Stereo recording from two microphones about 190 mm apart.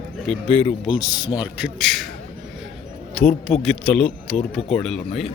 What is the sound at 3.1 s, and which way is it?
A man's voice, 5° left (ahead or behind).